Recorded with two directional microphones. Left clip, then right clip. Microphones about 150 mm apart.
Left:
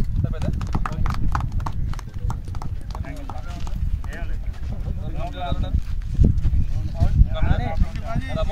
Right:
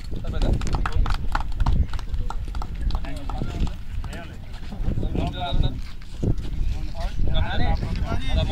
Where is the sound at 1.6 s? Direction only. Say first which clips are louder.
Right 1 dB; 30° right (ahead or behind).